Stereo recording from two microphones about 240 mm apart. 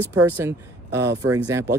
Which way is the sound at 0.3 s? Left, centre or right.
Centre.